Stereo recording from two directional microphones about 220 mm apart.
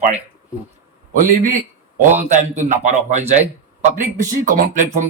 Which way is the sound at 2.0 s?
35° right (ahead or behind).